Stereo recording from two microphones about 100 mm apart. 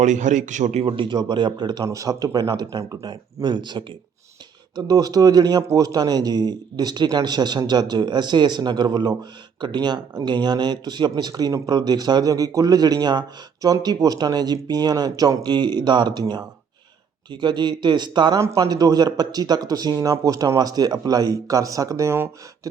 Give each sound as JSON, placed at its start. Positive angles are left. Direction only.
{"t": 0.7, "sound": "a man's voice", "side_deg": -90}
{"t": 0.9, "sound": "speech", "side_deg": -50}
{"t": 18.3, "sound": "speech", "side_deg": -35}